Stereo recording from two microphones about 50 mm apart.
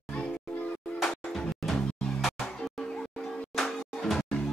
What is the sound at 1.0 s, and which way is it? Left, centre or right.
Music, centre.